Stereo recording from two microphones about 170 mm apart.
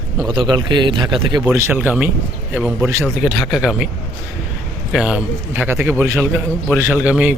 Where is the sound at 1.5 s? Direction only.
10° right (ahead or behind).